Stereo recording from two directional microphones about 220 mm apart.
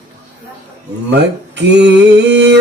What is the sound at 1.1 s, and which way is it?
Mantra, 50° right (ahead or behind).